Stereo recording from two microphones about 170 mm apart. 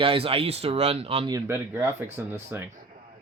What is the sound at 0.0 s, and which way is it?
Speech, 35° right (ahead or behind).